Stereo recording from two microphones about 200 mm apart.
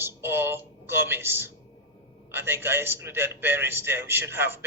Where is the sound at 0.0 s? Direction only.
10° right (ahead or behind).